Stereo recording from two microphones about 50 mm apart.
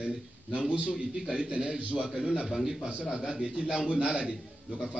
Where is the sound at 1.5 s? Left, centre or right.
Right.